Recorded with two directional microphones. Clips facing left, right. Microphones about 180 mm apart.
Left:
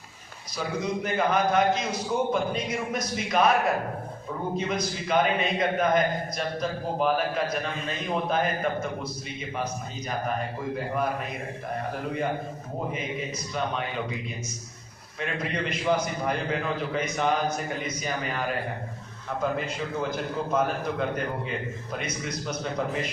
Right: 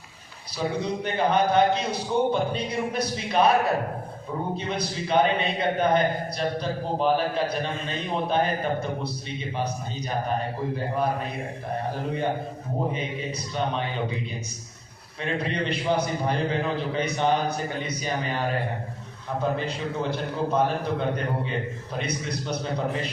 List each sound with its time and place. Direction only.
0.5 s a man's voice: 30° right (ahead or behind)
4.5 s a man's voice: 30° right (ahead or behind)
12.9 s a man's voice: 30° right (ahead or behind)
15.2 s a man's voice: 30° right (ahead or behind)